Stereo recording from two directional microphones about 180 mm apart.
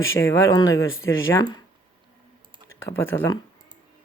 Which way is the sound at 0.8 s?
90° left.